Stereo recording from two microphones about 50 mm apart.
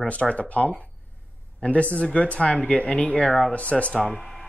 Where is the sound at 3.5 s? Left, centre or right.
Left.